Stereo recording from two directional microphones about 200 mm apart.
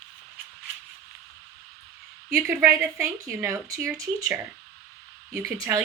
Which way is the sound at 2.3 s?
10° right (ahead or behind).